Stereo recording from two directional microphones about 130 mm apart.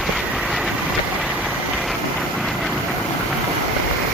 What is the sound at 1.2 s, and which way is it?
Vehicle, 5° right (ahead or behind).